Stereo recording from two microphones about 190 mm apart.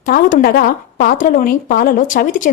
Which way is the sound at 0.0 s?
45° left (ahead or behind).